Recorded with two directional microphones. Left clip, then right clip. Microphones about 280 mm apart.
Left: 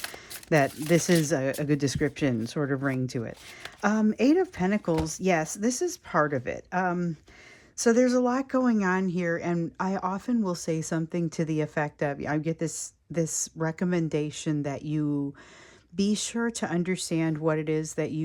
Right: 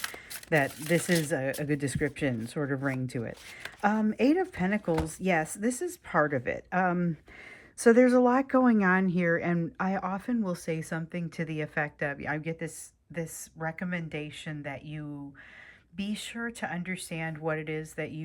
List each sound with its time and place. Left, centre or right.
0.0 s speech: centre